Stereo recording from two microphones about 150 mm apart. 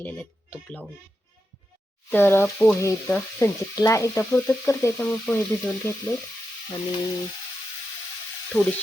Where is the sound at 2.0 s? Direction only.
15° left (ahead or behind).